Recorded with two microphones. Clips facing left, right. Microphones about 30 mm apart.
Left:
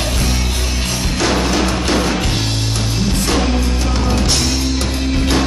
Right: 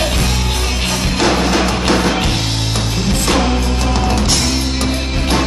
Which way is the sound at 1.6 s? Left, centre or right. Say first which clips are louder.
Right 2 dB; right.